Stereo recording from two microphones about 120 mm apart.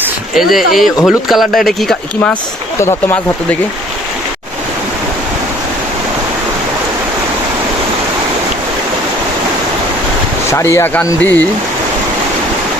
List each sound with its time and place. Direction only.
0.3 s speech: centre (ahead or behind)
10.5 s speech: 20° left (ahead or behind)